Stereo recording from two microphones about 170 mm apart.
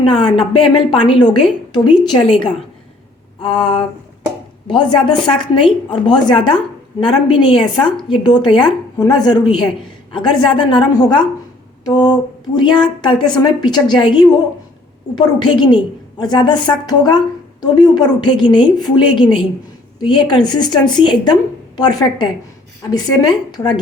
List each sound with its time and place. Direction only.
0.0 s a woman's voice: 30° left (ahead or behind)
3.4 s a woman's voice: 30° left (ahead or behind)